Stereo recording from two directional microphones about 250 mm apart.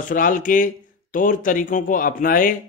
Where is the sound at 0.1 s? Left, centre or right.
Left.